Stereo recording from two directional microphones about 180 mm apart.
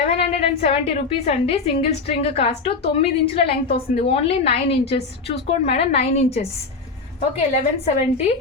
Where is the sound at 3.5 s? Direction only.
60° left (ahead or behind).